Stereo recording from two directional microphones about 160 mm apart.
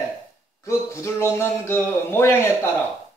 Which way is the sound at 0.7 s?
15° left (ahead or behind).